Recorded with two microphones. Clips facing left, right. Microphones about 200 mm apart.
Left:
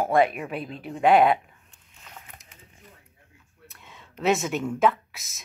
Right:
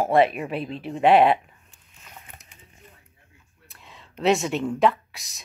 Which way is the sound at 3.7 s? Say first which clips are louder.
Right 2 dB; centre (ahead or behind).